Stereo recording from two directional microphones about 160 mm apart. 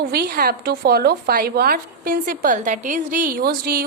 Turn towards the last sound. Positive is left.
turn(degrees=-65)  # may be behind; listen again after turning